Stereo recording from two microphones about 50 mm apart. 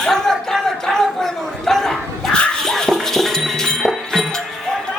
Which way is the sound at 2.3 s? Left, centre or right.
Centre.